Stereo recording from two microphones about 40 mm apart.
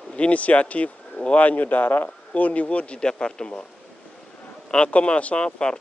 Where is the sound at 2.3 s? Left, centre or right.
Left.